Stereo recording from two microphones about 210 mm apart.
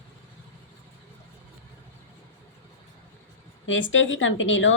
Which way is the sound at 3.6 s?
65° left (ahead or behind).